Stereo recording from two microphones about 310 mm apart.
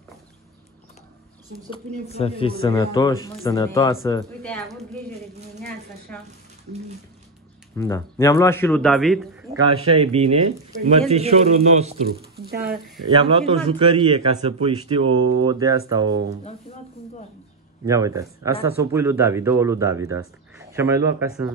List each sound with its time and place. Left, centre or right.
1.7 s speech: centre
6.1 s speech: centre
7.7 s speech: centre
9.8 s speech: centre
13.1 s a man's voice: centre
17.8 s a man's voice: centre